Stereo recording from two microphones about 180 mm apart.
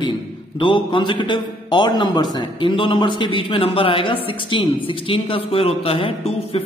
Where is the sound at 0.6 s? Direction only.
25° left (ahead or behind).